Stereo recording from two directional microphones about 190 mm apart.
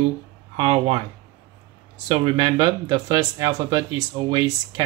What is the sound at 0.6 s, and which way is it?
Speech, 30° right (ahead or behind).